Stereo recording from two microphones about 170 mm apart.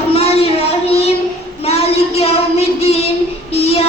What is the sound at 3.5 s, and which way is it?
Music, 35° left (ahead or behind).